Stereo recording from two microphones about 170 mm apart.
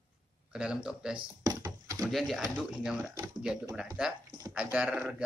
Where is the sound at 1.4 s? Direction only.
20° right (ahead or behind).